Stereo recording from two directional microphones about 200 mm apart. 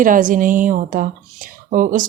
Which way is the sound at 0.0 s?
40° right (ahead or behind).